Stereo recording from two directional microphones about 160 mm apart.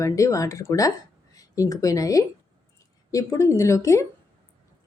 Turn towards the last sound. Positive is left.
turn(degrees=20)  # may be behind; listen again after turning